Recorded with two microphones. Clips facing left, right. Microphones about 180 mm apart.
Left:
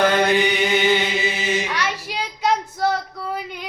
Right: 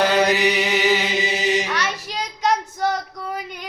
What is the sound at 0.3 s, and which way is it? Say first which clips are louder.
Music: left 1 dB; 5° right (ahead or behind).